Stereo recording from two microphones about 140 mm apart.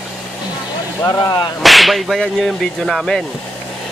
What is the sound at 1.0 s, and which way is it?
Speech, 25° left (ahead or behind).